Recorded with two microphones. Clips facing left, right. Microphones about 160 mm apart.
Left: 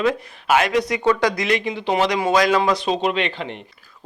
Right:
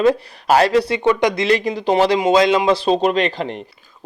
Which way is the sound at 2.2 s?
20° right (ahead or behind).